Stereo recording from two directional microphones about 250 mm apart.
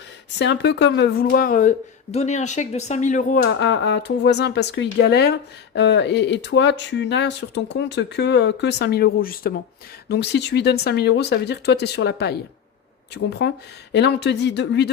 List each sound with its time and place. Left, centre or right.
0.3 s speech: left
13.4 s speech: left